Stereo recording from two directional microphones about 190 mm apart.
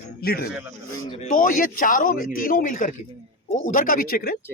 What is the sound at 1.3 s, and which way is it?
A man's voice, 45° left (ahead or behind).